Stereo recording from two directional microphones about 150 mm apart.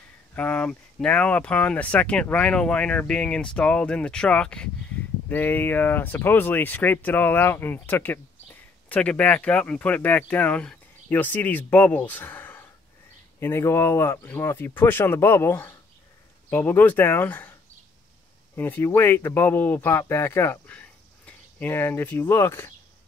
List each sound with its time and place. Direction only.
0.3 s speech: 10° left (ahead or behind)
18.6 s speech: 15° left (ahead or behind)